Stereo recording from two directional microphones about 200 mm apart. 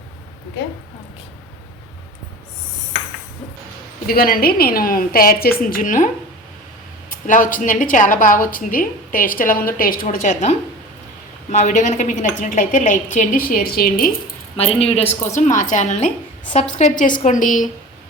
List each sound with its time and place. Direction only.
4.0 s a woman's voice: 50° left (ahead or behind)
7.1 s a woman's voice: 40° left (ahead or behind)
14.5 s a woman's voice: 30° left (ahead or behind)